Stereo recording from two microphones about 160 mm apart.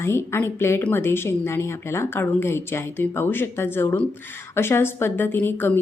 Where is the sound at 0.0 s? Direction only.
15° left (ahead or behind).